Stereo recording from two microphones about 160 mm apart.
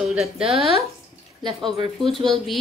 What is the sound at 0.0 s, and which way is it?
Speech, 5° right (ahead or behind).